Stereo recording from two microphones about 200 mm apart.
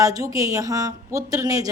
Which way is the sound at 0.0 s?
15° right (ahead or behind).